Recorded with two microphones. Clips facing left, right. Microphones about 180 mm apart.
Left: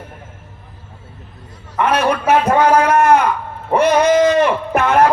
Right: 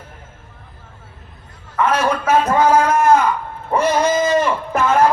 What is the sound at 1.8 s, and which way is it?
A man's voice, 65° left (ahead or behind).